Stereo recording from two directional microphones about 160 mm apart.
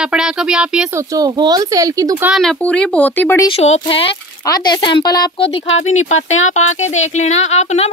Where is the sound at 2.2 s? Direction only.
Centre (ahead or behind).